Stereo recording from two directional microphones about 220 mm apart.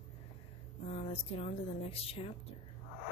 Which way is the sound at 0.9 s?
30° left (ahead or behind).